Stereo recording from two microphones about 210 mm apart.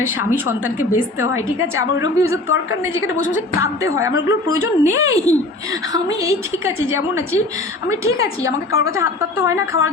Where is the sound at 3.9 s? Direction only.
15° right (ahead or behind).